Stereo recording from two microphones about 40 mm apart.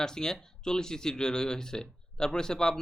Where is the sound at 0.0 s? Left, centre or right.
Centre.